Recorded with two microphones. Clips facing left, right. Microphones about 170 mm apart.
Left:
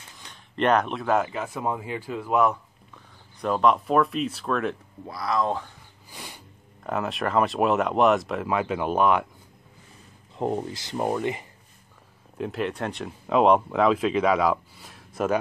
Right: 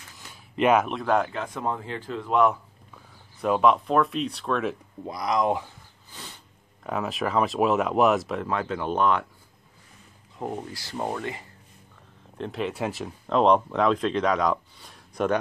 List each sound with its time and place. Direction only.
0.2 s speech: 5° right (ahead or behind)
5.0 s speech: 20° right (ahead or behind)
6.0 s snort: 10° left (ahead or behind)
6.8 s speech: centre (ahead or behind)
10.4 s speech: 25° left (ahead or behind)
12.4 s speech: centre (ahead or behind)